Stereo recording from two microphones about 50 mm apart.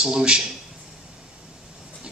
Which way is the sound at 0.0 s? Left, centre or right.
Centre.